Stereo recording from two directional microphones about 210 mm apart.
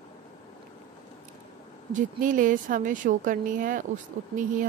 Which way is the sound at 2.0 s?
40° right (ahead or behind).